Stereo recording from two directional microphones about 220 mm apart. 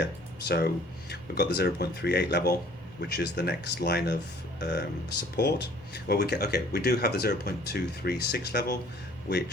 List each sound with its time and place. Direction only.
0.0 s speech: 45° left (ahead or behind)